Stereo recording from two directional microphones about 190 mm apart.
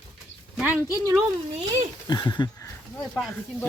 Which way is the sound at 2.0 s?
20° left (ahead or behind).